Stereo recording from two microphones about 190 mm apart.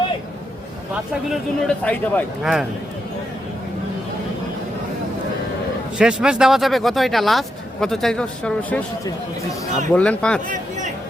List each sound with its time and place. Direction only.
1.3 s speech: 5° left (ahead or behind)
6.0 s speech: 5° right (ahead or behind)
9.9 s speech: 5° left (ahead or behind)
10.5 s a sound: 40° right (ahead or behind)